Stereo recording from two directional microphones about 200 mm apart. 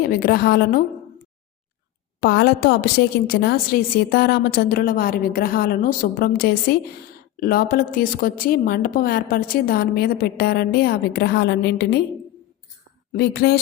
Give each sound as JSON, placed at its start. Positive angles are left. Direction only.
{"t": 0.1, "sound": "a woman's voice", "side_deg": 50}
{"t": 2.2, "sound": "a woman's voice", "side_deg": 55}
{"t": 13.1, "sound": "a woman's voice", "side_deg": 55}